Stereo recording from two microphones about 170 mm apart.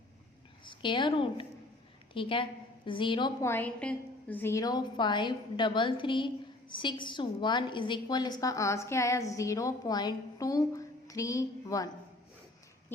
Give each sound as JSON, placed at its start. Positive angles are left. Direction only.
{"t": 0.6, "sound": "a woman's voice", "side_deg": 30}
{"t": 3.4, "sound": "a woman's voice", "side_deg": 10}